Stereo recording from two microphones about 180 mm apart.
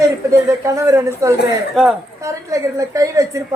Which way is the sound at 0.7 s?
15° right (ahead or behind).